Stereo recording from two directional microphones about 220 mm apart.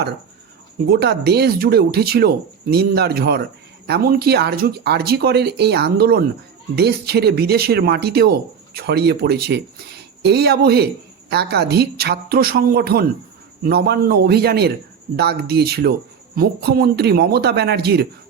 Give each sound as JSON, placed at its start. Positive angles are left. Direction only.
{"t": 0.9, "sound": "speech", "side_deg": -50}